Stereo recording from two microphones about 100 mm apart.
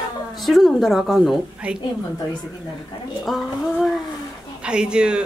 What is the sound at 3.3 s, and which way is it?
Speech, centre (ahead or behind).